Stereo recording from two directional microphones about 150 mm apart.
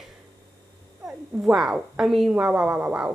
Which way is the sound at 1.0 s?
5° right (ahead or behind).